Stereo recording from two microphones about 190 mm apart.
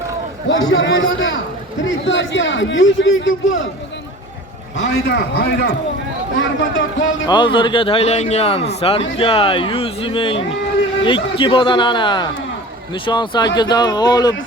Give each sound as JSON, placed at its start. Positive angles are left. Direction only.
{"t": 0.4, "sound": "a man's voice", "side_deg": 75}
{"t": 4.8, "sound": "a man's voice", "side_deg": 60}
{"t": 6.3, "sound": "a man's voice", "side_deg": 75}
{"t": 7.3, "sound": "speech", "side_deg": 25}